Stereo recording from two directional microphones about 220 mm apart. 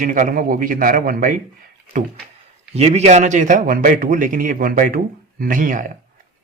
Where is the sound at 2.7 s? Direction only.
30° right (ahead or behind).